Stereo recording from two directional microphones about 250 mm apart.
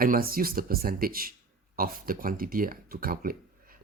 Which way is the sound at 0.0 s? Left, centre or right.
Right.